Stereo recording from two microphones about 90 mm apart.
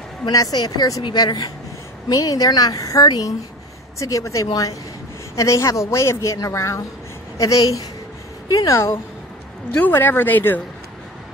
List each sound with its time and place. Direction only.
0.3 s a woman's voice: 45° left (ahead or behind)
9.7 s speech: 20° left (ahead or behind)